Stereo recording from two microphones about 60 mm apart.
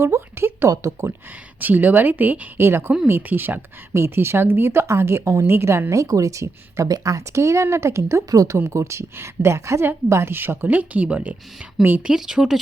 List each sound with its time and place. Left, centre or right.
0.0 s a sound: right
0.7 s speech: right
1.5 s a woman's voice: right
2.6 s speech: right
3.9 s speech: right
5.9 s speech: right
12.0 s speech: centre